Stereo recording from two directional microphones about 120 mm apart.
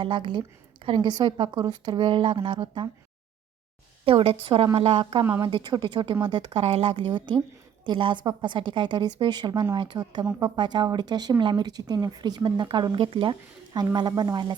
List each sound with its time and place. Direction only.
0.0 s a woman's voice: 45° right (ahead or behind)
2.6 s speech: 35° right (ahead or behind)
4.0 s a woman's voice: 50° right (ahead or behind); by 14.5 s 35° right (ahead or behind)